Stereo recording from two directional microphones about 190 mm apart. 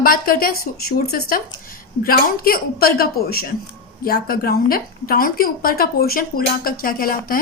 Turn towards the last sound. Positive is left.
turn(degrees=50)  # may be behind; listen again after turning